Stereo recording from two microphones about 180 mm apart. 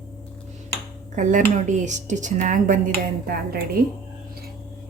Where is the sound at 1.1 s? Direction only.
45° right (ahead or behind).